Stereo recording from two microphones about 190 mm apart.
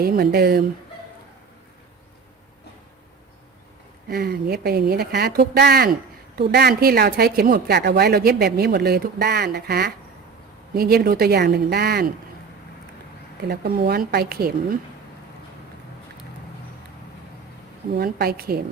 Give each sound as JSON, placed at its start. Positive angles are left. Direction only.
{"t": 0.0, "sound": "a woman's voice", "side_deg": -55}
{"t": 4.1, "sound": "speech", "side_deg": -55}
{"t": 13.5, "sound": "speech", "side_deg": -55}
{"t": 17.9, "sound": "a woman's voice", "side_deg": -55}